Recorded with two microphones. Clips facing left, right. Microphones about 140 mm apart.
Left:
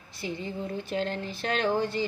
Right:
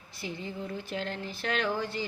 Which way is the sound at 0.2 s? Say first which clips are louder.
Left 3 dB; 20° left (ahead or behind).